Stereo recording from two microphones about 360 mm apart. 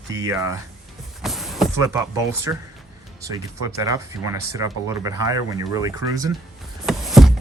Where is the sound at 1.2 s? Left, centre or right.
Centre.